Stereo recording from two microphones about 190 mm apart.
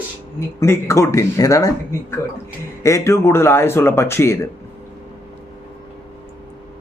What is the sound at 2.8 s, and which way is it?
Speech, 15° left (ahead or behind).